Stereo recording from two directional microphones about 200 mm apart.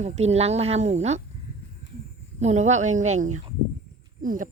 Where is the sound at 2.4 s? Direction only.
35° right (ahead or behind).